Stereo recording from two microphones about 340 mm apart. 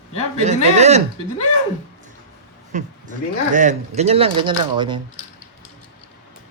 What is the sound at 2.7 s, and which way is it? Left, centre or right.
A man's voice, right.